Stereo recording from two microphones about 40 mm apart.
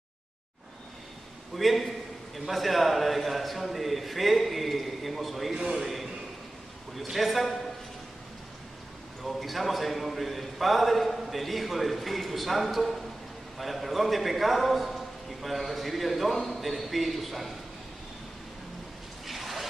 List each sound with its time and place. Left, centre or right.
1.5 s a man's voice: centre
9.2 s a man's voice: centre
19.2 s a sound: centre